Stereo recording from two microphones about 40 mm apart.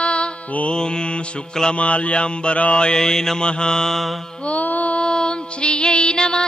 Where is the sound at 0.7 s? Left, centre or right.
Left.